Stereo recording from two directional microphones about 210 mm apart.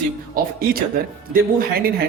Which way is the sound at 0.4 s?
45° right (ahead or behind).